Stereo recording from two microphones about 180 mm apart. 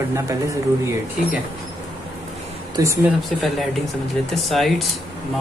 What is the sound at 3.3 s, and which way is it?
Speech, centre (ahead or behind).